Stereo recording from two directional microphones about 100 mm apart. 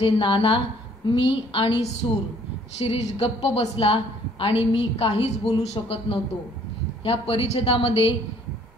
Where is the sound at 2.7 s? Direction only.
85° left.